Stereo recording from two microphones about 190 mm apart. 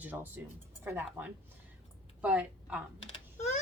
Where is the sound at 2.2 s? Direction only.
5° right (ahead or behind).